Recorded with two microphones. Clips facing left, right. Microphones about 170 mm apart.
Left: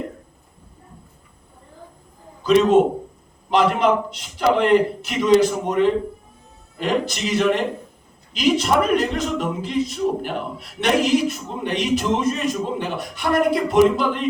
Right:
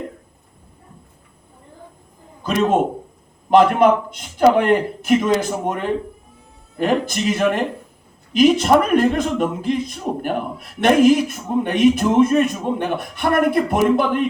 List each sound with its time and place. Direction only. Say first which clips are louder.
3.5 s a man's voice: right 5 dB; 50° right (ahead or behind)